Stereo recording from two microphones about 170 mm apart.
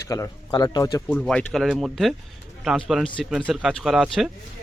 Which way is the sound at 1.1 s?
5° left (ahead or behind).